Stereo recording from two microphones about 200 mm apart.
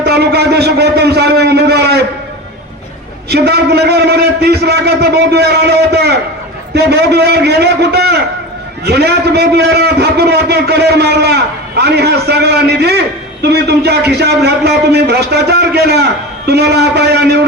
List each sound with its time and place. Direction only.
0.0 s a man's voice: 55° right (ahead or behind)
3.2 s a man's voice: 55° right (ahead or behind)